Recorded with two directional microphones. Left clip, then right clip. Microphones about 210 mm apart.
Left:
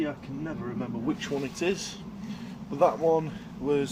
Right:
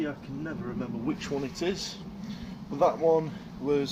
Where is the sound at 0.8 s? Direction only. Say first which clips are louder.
Left 2 dB; 10° left (ahead or behind).